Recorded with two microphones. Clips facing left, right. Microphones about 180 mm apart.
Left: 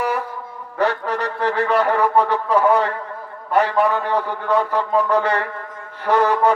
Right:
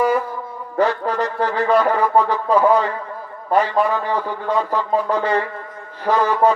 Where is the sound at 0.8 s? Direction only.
70° left (ahead or behind).